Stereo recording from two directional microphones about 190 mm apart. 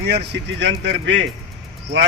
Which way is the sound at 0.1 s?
60° right (ahead or behind).